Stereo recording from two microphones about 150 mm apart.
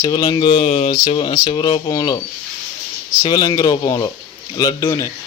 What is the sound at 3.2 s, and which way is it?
Speech, 30° left (ahead or behind).